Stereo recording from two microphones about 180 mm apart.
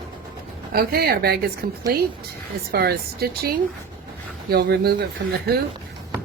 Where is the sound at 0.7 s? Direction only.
60° right (ahead or behind).